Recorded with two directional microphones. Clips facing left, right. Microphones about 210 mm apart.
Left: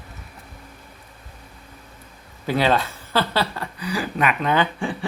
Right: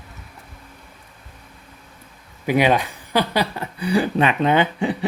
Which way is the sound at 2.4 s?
15° right (ahead or behind).